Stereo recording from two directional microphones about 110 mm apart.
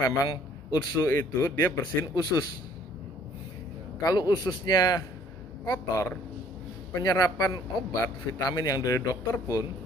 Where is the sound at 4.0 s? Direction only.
35° left (ahead or behind).